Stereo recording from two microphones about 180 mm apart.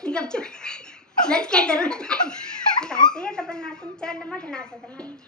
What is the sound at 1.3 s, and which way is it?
A woman's voice, 5° left (ahead or behind).